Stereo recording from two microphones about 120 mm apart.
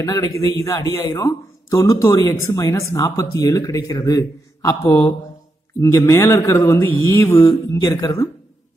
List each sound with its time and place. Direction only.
0.0 s a man's voice: 30° left (ahead or behind)